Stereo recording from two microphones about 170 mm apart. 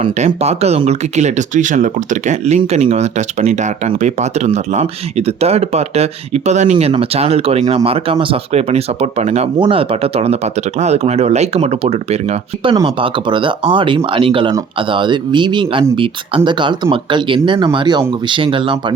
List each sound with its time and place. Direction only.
0.0 s speech: 35° right (ahead or behind)